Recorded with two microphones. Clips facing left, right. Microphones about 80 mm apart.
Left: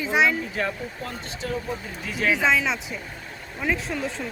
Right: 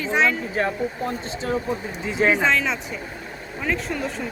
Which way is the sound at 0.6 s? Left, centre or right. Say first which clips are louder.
Right 7 dB; right.